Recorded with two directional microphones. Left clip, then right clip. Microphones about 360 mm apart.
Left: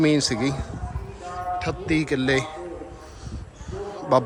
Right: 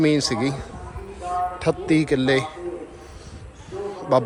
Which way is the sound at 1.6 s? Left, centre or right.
Centre.